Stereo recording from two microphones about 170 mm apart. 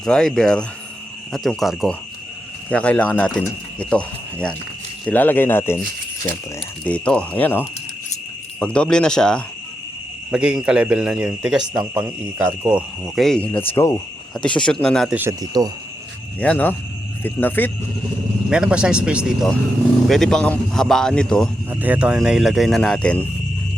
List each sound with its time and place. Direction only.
0.0 s a man's voice: 5° left (ahead or behind)
6.8 s a man's voice: 5° left (ahead or behind)
15.1 s speech: 15° right (ahead or behind)
16.4 s speech: 10° left (ahead or behind)
18.5 s a man's voice: 5° right (ahead or behind)
21.7 s a man's voice: 10° right (ahead or behind)